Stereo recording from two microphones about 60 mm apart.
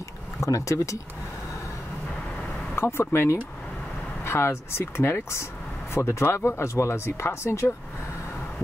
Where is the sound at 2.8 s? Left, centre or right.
Left.